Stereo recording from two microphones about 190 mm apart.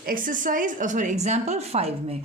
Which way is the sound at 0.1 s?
45° right (ahead or behind).